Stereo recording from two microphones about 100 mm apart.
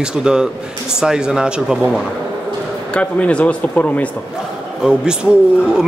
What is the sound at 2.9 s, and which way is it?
Speech, 10° left (ahead or behind).